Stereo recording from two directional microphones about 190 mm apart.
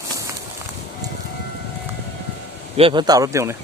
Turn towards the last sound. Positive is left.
turn(degrees=-15)  # may be behind; listen again after turning